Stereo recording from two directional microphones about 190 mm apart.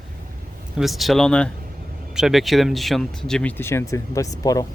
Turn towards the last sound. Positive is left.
turn(degrees=20)  # may be behind; listen again after turning